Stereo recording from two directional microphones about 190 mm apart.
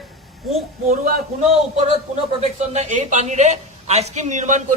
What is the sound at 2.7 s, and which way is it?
A man's voice, 40° right (ahead or behind).